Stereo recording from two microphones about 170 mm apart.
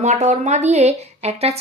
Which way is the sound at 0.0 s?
40° right (ahead or behind).